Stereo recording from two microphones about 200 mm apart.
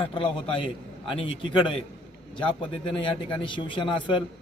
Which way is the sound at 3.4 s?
25° left (ahead or behind).